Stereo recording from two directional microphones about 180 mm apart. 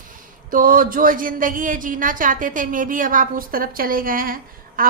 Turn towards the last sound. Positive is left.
turn(degrees=-50)  # may be behind; listen again after turning